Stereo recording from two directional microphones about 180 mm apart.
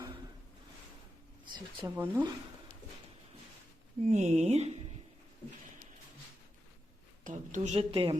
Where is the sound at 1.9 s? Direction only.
10° right (ahead or behind).